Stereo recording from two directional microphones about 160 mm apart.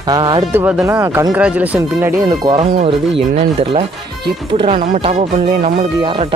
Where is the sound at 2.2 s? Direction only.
25° right (ahead or behind).